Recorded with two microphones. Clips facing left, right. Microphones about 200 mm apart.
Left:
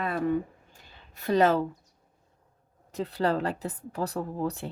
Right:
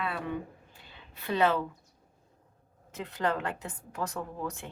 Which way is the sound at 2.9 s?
35° left (ahead or behind).